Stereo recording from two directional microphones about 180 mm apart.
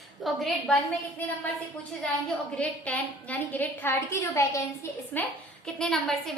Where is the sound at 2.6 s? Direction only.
10° left (ahead or behind).